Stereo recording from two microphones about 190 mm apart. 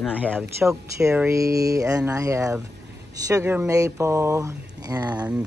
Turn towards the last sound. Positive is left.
turn(degrees=-5)  # may be behind; listen again after turning